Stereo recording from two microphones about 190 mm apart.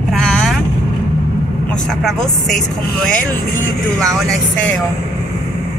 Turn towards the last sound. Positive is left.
turn(degrees=0)  # may be behind; listen again after turning